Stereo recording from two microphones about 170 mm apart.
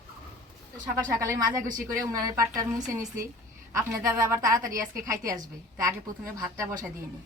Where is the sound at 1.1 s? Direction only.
20° right (ahead or behind).